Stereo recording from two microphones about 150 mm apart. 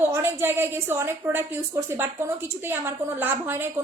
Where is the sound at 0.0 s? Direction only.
15° right (ahead or behind).